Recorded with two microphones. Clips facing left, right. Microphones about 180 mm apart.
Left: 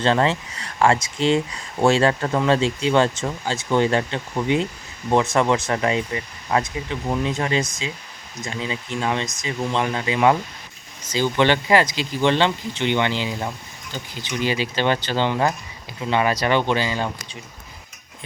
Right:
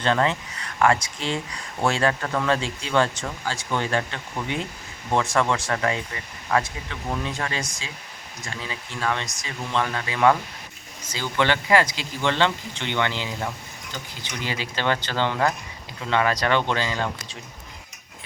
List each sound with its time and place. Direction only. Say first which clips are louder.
0.0 s speech: left 3 dB; 30° left (ahead or behind); by 17.1 s 15° left (ahead or behind)